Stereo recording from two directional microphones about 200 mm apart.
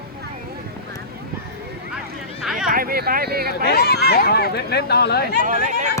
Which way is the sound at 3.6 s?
55° left (ahead or behind).